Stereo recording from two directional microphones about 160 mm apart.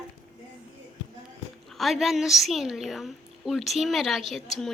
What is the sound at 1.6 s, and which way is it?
A woman's voice, centre (ahead or behind).